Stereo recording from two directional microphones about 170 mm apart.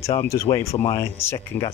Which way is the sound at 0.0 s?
15° left (ahead or behind).